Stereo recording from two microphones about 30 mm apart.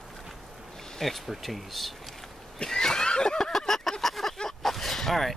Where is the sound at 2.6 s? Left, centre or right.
Left.